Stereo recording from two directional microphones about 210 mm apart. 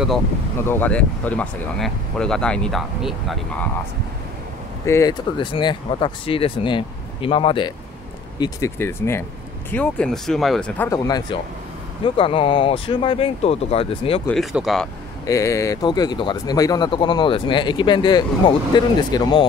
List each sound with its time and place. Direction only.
0.7 s speech: 10° left (ahead or behind)
4.8 s speech: 15° left (ahead or behind)
10.9 s speech: 20° left (ahead or behind)
14.2 s speech: centre (ahead or behind)
15.2 s speech: 15° left (ahead or behind)